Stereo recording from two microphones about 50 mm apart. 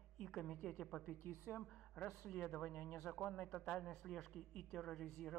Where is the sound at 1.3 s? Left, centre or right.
Left.